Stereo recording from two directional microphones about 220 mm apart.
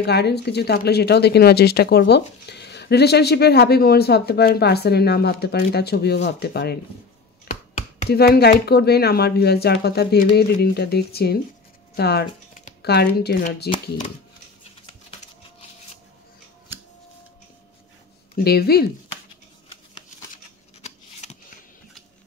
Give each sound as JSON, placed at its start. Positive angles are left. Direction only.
{"t": 0.0, "sound": "speech", "side_deg": 50}
{"t": 7.5, "sound": "finger snapping", "side_deg": 45}
{"t": 8.1, "sound": "speech", "side_deg": 45}
{"t": 18.3, "sound": "speech", "side_deg": 45}
{"t": 20.8, "sound": "scissors", "side_deg": 30}